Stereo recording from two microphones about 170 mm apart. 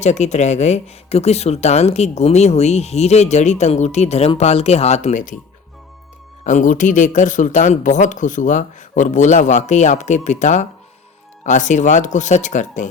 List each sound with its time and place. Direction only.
0.0 s speech: 40° left (ahead or behind)
6.4 s speech: 50° left (ahead or behind)